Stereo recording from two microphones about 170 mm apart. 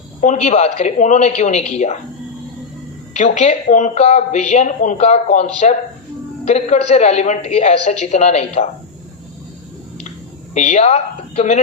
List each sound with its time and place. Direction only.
0.2 s a woman's voice: 45° left (ahead or behind)
3.2 s a woman's voice: 40° left (ahead or behind)
10.5 s a woman's voice: 45° left (ahead or behind)